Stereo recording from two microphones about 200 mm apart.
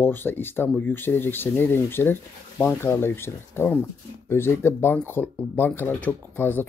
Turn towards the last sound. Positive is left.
turn(degrees=10)  # may be behind; listen again after turning